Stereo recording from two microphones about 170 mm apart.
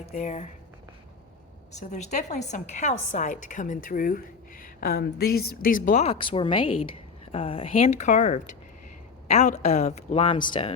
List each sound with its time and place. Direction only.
0.0 s a woman's voice: 45° left (ahead or behind)
1.7 s a woman's voice: 45° left (ahead or behind); by 10.7 s 30° left (ahead or behind)